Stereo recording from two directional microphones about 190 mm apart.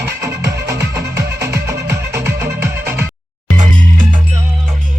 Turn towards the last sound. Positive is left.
turn(degrees=-40)  # may be behind; listen again after turning